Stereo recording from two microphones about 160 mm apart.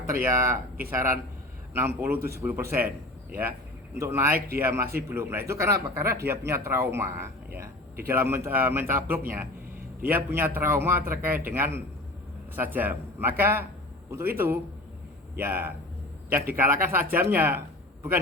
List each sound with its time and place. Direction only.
0.1 s speech: 15° right (ahead or behind)
3.9 s speech: 15° right (ahead or behind)